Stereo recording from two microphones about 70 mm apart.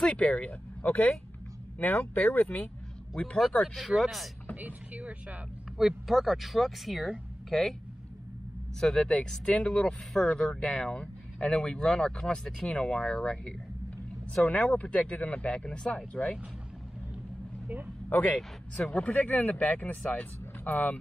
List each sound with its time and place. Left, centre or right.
0.0 s speech: centre
3.6 s speech: centre
4.6 s speech: right
5.8 s speech: centre
8.7 s speech: centre
18.1 s speech: left
18.9 s speech: centre